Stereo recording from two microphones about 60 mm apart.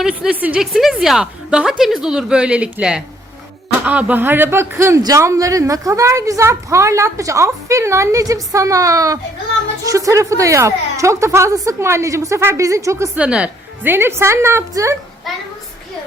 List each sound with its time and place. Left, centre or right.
0.1 s a woman's voice: centre
0.6 s a woman's voice: centre
3.8 s speech: right
5.0 s a woman's voice: right
13.1 s a woman's voice: centre
13.8 s a woman's voice: right
14.7 s a woman's voice: right